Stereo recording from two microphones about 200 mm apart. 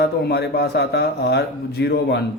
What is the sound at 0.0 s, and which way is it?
Speech, 55° left (ahead or behind).